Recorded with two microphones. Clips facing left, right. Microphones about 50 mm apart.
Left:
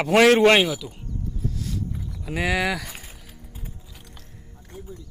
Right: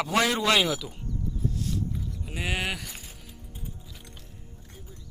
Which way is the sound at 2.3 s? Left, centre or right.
Left.